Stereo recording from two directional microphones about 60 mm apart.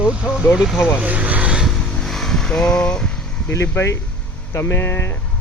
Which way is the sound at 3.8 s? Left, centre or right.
Left.